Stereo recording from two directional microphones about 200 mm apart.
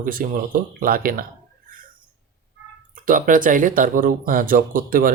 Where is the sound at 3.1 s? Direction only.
45° right (ahead or behind).